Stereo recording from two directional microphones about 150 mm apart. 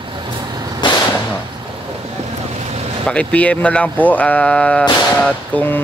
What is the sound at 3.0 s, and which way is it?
Speech, 10° left (ahead or behind).